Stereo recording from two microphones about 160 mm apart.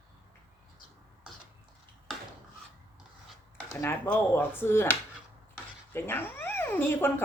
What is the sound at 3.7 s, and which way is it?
Speech, 15° left (ahead or behind).